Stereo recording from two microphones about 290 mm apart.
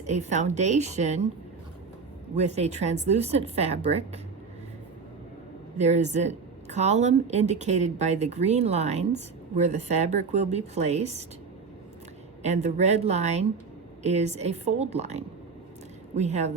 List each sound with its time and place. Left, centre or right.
0.0 s a woman's voice: right
2.3 s a woman's voice: right
5.7 s a woman's voice: right
12.4 s a woman's voice: right